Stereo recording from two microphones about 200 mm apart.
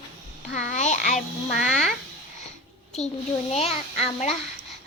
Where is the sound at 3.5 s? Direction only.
30° left (ahead or behind).